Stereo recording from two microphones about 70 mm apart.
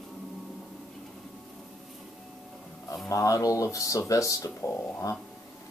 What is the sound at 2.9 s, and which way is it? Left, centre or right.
Speech, left.